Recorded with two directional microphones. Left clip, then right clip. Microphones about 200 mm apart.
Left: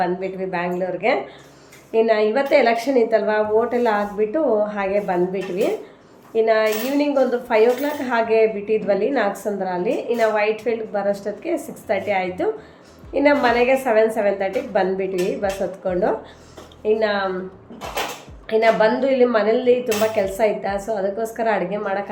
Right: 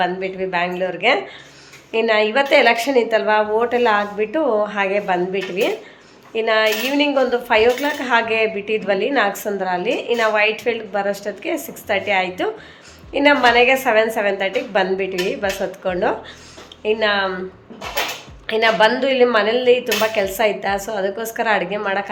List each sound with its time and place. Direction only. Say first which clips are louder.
0.0 s speech: right 2 dB; centre (ahead or behind)
18.4 s speech: right 1 dB; centre (ahead or behind)